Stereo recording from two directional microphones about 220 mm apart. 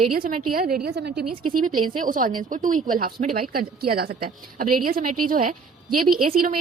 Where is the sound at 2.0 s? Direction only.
40° right (ahead or behind).